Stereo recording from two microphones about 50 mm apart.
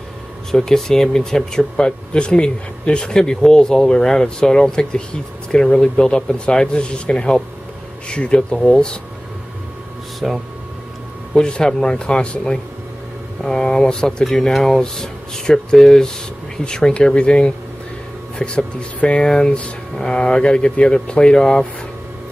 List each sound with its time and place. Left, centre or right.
0.5 s speech: centre
10.2 s speech: centre
11.3 s speech: centre